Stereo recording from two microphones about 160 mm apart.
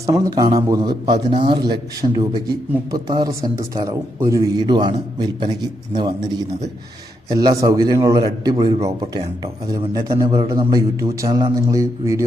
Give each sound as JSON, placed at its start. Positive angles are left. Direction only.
{"t": 0.0, "sound": "speech", "side_deg": -20}
{"t": 7.3, "sound": "speech", "side_deg": -25}
{"t": 9.0, "sound": "speech", "side_deg": -25}